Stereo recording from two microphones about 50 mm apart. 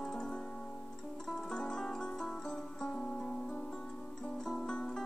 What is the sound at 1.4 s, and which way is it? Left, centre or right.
Music, centre.